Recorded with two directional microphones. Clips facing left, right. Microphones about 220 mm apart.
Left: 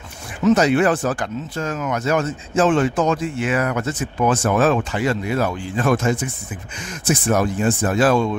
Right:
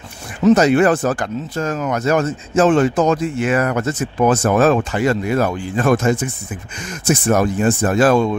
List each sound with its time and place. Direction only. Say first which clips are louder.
0.4 s speech: right 3 dB; 40° right (ahead or behind)